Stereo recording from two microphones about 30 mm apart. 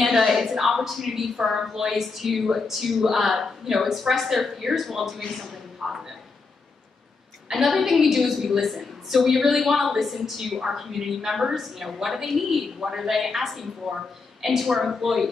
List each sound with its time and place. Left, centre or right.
0.0 s a woman's voice: centre
5.8 s a woman's voice: centre
7.5 s a woman's voice: centre
12.8 s a woman's voice: centre
13.1 s a woman's voice: centre